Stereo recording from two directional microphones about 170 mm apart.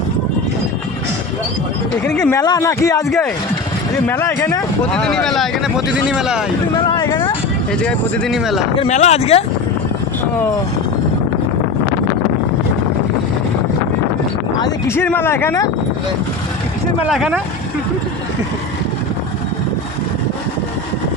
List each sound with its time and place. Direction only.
2.0 s speech: 5° left (ahead or behind)
2.3 s speech: 20° left (ahead or behind)
4.0 s speech: 10° left (ahead or behind)
4.9 s speech: 5° left (ahead or behind)
6.7 s speech: 25° left (ahead or behind)
7.7 s speech: 5° left (ahead or behind)
8.7 s speech: 40° left (ahead or behind)
14.8 s speech: 10° left (ahead or behind)
17.0 s speech: 5° right (ahead or behind)